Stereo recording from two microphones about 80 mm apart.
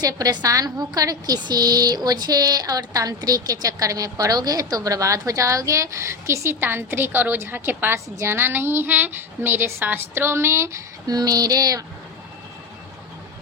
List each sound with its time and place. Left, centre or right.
0.0 s a woman's voice: right
11.0 s a woman's voice: right